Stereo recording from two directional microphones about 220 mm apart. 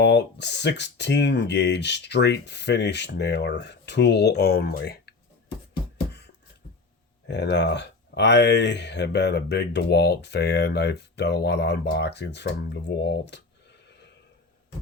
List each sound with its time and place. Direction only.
0.0 s speech: 50° left (ahead or behind)
7.3 s speech: 50° left (ahead or behind)